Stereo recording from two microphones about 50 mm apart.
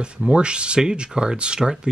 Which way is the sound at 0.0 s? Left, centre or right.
Centre.